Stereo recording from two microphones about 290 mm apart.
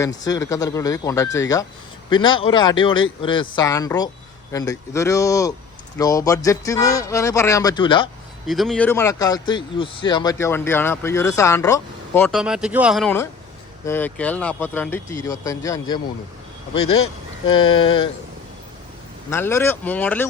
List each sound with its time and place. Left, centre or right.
0.0 s speech: centre
8.4 s speech: centre
17.5 s speech: centre
19.3 s speech: centre